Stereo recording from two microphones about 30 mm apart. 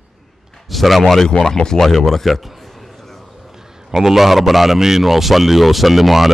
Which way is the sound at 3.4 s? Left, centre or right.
Centre.